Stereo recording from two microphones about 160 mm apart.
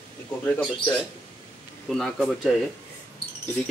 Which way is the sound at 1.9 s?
Centre (ahead or behind).